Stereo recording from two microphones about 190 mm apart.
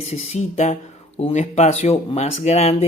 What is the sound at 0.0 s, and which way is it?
Speech, 35° left (ahead or behind).